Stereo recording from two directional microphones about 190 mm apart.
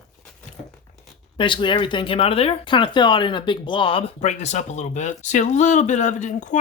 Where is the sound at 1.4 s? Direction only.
25° left (ahead or behind).